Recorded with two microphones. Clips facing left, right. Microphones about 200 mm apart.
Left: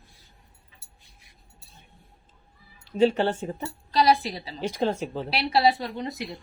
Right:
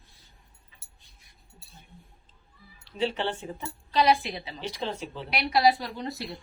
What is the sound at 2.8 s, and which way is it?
A woman's voice, 45° left (ahead or behind).